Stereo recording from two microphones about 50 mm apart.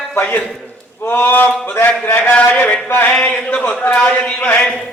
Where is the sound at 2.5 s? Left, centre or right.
Left.